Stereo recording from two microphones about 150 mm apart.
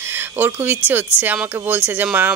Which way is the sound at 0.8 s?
10° right (ahead or behind).